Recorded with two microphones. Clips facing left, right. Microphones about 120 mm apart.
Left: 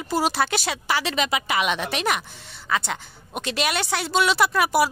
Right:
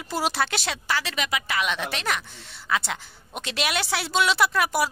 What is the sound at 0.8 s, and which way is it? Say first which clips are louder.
Speech: left 3 dB; 15° left (ahead or behind).